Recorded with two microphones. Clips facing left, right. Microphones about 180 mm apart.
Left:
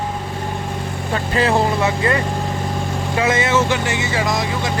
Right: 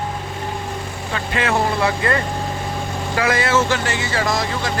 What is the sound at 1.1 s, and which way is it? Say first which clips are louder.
Speech: left 4 dB; 35° left (ahead or behind).